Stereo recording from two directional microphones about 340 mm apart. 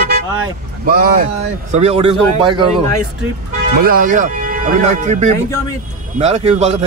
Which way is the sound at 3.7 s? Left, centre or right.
Right.